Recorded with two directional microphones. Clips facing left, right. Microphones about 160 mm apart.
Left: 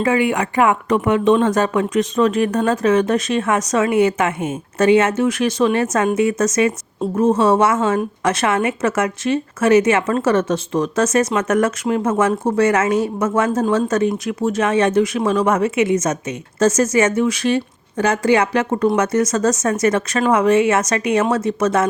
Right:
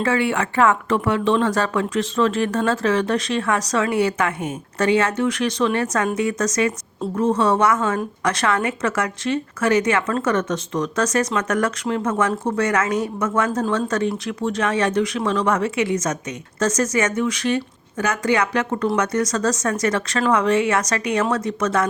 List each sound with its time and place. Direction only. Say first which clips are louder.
0.0 s speech: left 3 dB; 15° left (ahead or behind)